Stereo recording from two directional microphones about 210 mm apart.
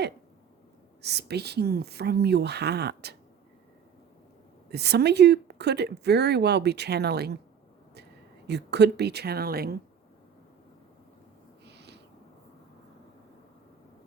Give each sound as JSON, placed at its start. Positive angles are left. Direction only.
{"t": 1.0, "sound": "speech", "side_deg": -50}
{"t": 4.7, "sound": "speech", "side_deg": -50}
{"t": 8.4, "sound": "speech", "side_deg": -55}
{"t": 11.6, "sound": "a sound", "side_deg": -55}